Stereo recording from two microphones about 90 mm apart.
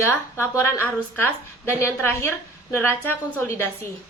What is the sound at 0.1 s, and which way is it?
A woman's voice, 30° left (ahead or behind).